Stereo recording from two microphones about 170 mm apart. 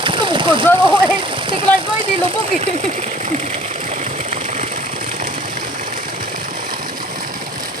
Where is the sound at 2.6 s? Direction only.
40° right (ahead or behind).